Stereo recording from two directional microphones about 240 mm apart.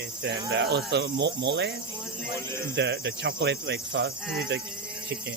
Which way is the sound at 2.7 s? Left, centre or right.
Right.